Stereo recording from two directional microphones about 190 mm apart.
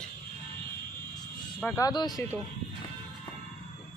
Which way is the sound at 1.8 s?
20° left (ahead or behind).